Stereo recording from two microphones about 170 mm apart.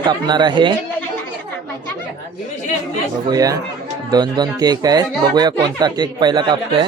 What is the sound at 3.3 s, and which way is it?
Speech, 20° right (ahead or behind).